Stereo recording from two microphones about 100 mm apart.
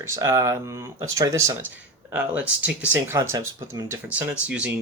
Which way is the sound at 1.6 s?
20° right (ahead or behind).